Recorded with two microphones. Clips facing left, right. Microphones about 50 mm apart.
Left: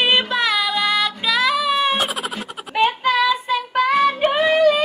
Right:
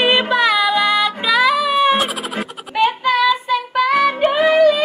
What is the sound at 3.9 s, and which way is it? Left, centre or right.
Music, right.